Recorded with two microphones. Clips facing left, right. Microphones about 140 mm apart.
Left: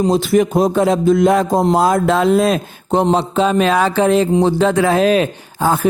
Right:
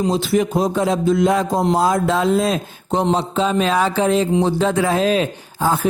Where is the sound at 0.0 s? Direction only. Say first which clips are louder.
Left 4 dB; 45° left (ahead or behind).